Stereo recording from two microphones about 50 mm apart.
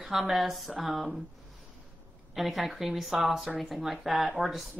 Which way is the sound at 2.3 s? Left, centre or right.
Centre.